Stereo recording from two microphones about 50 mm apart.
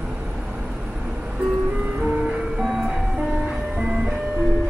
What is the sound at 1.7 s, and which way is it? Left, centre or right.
Music, right.